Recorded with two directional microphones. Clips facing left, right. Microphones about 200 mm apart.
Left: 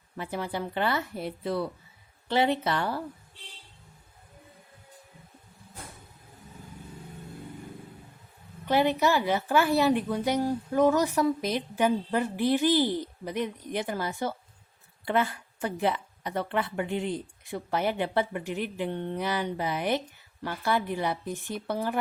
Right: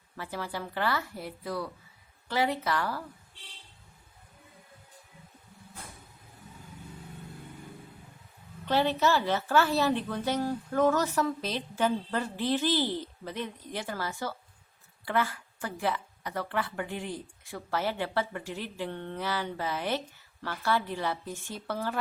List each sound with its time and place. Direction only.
0.2 s speech: 20° left (ahead or behind)
8.6 s speech: 15° left (ahead or behind)